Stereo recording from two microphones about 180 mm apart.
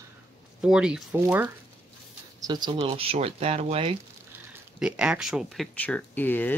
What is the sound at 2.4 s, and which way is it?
Speech, 25° right (ahead or behind).